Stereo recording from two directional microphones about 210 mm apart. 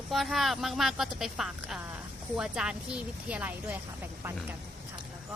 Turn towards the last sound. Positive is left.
turn(degrees=-5)  # may be behind; listen again after turning